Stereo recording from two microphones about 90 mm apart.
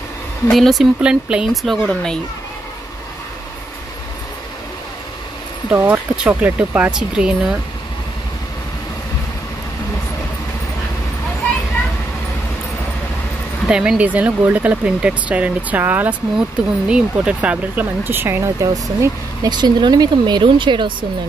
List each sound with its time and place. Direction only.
0.5 s speech: centre (ahead or behind)
1.0 s speech: 10° right (ahead or behind)
1.5 s speech: centre (ahead or behind)
5.9 s speech: 20° right (ahead or behind)
13.7 s speech: 10° right (ahead or behind); by 20.9 s 65° right (ahead or behind)